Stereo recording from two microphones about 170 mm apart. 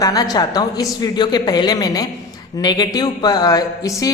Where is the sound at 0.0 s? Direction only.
20° left (ahead or behind).